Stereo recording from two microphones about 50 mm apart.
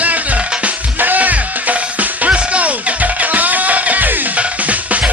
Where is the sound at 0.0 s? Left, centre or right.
Right.